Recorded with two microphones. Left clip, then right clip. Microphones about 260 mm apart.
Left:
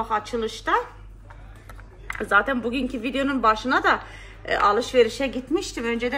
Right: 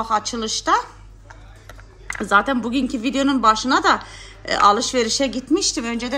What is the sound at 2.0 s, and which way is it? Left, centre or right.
Speech, right.